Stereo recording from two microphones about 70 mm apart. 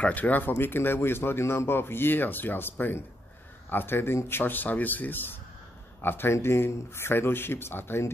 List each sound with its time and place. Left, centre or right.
0.0 s speech: left